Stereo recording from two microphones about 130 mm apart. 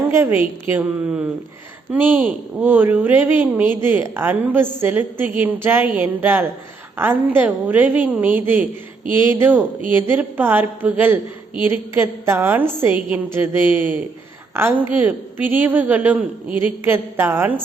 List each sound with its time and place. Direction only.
0.1 s a woman's voice: 20° right (ahead or behind)